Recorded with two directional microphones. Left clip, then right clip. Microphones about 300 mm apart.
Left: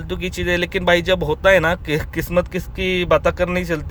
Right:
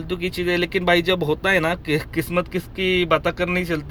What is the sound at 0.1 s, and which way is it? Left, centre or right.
Speech, centre.